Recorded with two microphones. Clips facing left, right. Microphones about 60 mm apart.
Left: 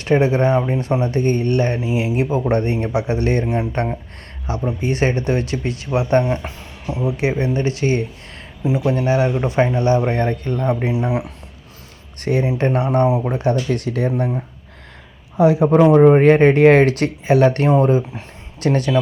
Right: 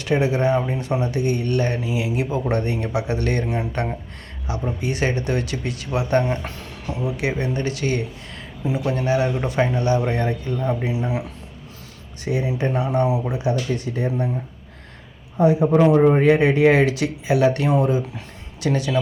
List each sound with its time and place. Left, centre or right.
0.0 s speech: left
6.2 s speech: centre
7.0 s speech: left
10.2 s speech: left
10.8 s speech: left
12.2 s speech: left
13.4 s speech: left
15.4 s a man's voice: left
16.0 s speech: left